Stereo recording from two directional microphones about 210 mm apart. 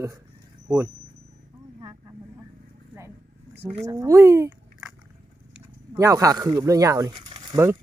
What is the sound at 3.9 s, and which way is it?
Speech, 15° right (ahead or behind).